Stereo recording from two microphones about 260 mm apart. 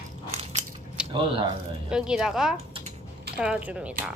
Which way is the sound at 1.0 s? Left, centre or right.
Centre.